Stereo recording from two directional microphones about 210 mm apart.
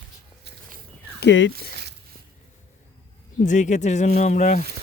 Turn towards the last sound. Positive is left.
turn(degrees=35)  # may be behind; listen again after turning